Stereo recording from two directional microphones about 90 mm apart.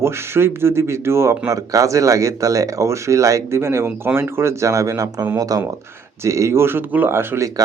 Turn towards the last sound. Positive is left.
turn(degrees=-25)  # may be behind; listen again after turning